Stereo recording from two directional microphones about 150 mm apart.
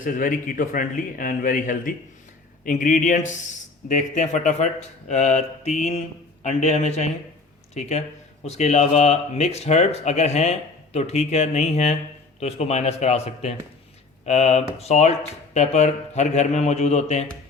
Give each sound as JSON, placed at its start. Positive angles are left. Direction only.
{"t": 0.0, "sound": "speech", "side_deg": 65}